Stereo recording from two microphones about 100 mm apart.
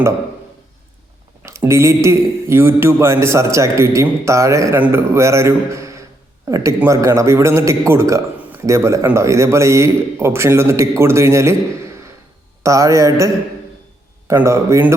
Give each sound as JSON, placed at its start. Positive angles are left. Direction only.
{"t": 1.4, "sound": "a man's voice", "side_deg": -30}
{"t": 12.6, "sound": "a man's voice", "side_deg": -35}